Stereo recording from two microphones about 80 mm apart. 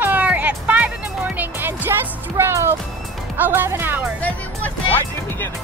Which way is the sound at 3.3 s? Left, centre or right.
Right.